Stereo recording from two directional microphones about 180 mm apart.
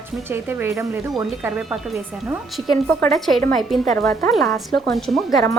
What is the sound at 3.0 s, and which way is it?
Speech, centre (ahead or behind).